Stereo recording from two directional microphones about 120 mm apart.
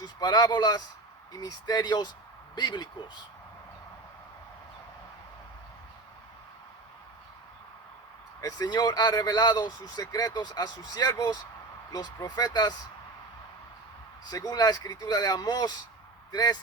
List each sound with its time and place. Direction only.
0.0 s speech: 30° left (ahead or behind)
8.4 s speech: 30° left (ahead or behind)
14.3 s speech: 30° left (ahead or behind)